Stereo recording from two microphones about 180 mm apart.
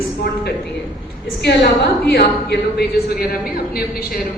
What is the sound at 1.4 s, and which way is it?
A man's voice, 70° left (ahead or behind).